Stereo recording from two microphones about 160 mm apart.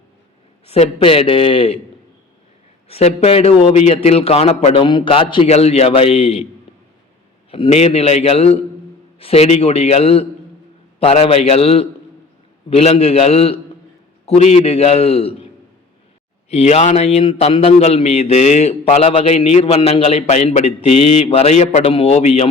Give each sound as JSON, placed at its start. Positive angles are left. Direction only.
{"t": 0.7, "sound": "a man's voice", "side_deg": 40}
{"t": 2.9, "sound": "a man's voice", "side_deg": 40}
{"t": 7.5, "sound": "a man's voice", "side_deg": 40}
{"t": 16.5, "sound": "a man's voice", "side_deg": 40}